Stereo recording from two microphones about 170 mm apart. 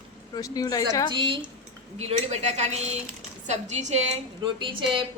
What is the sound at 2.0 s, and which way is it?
A woman's voice, 40° right (ahead or behind).